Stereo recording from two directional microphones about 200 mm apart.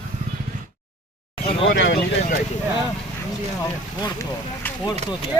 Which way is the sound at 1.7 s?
65° left (ahead or behind).